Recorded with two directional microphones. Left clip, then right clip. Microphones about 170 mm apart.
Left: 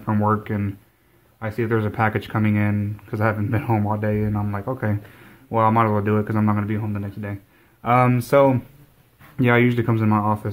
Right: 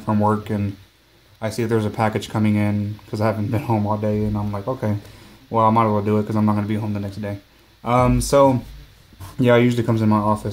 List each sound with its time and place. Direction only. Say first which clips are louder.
0.0 s speech: right 2 dB; 5° left (ahead or behind)
4.3 s speech: right 1 dB; 20° left (ahead or behind)
4.6 s speech: right 3 dB; 5° left (ahead or behind)
6.5 s speech: right 2 dB; 5° right (ahead or behind)
7.8 s speech: even; 10° left (ahead or behind)
9.4 s speech: right 2 dB; centre (ahead or behind)